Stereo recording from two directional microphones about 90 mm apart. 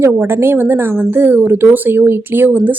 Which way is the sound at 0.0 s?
30° right (ahead or behind).